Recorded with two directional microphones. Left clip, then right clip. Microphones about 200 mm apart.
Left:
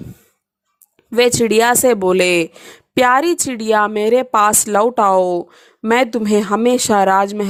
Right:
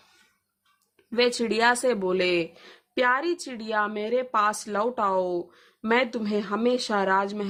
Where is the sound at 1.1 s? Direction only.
50° left (ahead or behind).